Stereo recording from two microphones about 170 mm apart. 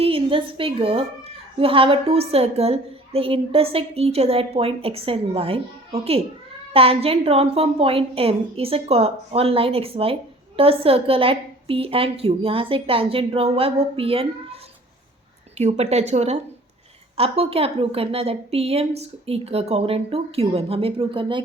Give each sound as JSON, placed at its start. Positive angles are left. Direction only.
{"t": 0.0, "sound": "a woman's voice", "side_deg": -30}